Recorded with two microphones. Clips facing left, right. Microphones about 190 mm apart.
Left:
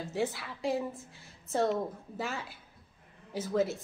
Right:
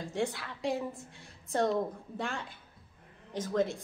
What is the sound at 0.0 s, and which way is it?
A woman's voice, 5° left (ahead or behind).